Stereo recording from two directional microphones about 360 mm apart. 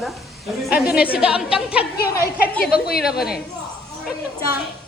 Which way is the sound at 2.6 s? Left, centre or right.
Left.